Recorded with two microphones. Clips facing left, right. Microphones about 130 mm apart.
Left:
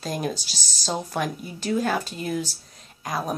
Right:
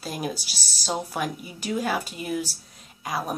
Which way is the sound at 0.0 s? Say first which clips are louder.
Left 3 dB; 5° right (ahead or behind).